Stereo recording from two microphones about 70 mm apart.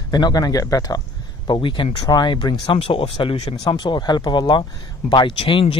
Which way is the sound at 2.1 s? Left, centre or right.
Left.